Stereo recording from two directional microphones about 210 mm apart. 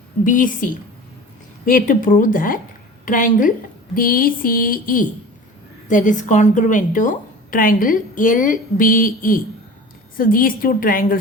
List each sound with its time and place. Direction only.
0.3 s a woman's voice: 40° left (ahead or behind)
3.9 s a sound: 45° left (ahead or behind)
5.9 s a woman's voice: 35° left (ahead or behind)